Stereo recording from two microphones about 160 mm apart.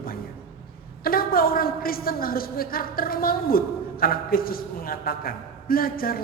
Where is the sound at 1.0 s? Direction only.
65° left (ahead or behind).